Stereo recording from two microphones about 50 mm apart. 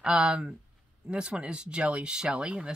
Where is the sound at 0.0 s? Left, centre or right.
Centre.